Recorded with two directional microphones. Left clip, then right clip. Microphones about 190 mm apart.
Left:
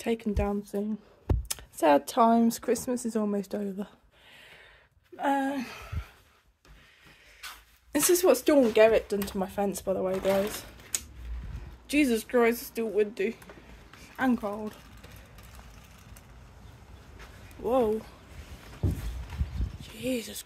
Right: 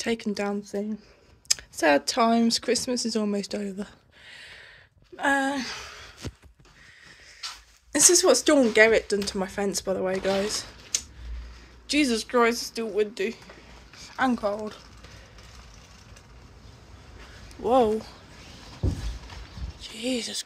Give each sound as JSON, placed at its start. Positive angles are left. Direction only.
{"t": 0.0, "sound": "a woman's voice", "side_deg": 5}
{"t": 7.9, "sound": "speech", "side_deg": 10}
{"t": 11.9, "sound": "a woman's voice", "side_deg": 10}
{"t": 17.6, "sound": "speech", "side_deg": -5}
{"t": 18.8, "sound": "a sound", "side_deg": -10}
{"t": 19.8, "sound": "speech", "side_deg": 5}